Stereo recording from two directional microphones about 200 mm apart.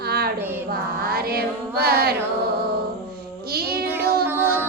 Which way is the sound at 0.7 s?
50° right (ahead or behind).